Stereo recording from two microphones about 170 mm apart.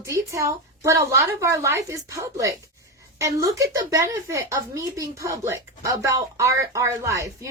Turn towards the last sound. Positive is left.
turn(degrees=-20)  # may be behind; listen again after turning